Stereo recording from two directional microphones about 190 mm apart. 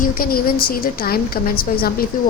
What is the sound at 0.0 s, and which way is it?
A woman's voice, 45° left (ahead or behind).